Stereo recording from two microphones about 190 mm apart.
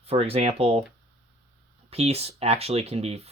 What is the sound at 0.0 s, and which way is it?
Speech, 30° right (ahead or behind).